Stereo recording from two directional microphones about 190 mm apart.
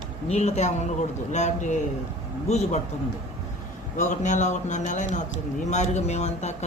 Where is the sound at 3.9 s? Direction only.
40° left (ahead or behind).